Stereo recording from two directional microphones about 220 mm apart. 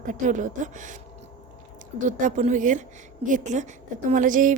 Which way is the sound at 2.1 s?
35° right (ahead or behind).